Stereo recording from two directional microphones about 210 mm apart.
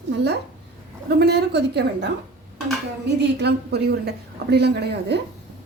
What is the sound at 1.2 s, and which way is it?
Speech, 50° right (ahead or behind).